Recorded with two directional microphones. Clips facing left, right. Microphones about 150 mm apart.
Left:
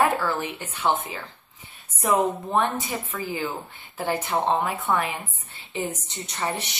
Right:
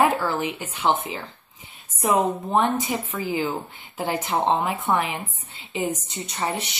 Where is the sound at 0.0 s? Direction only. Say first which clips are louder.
Right 2 dB; 15° right (ahead or behind).